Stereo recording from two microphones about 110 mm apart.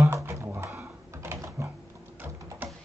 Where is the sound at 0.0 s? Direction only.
25° right (ahead or behind).